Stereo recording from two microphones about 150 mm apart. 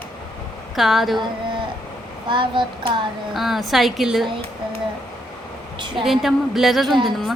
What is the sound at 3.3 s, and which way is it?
A woman's voice, centre (ahead or behind).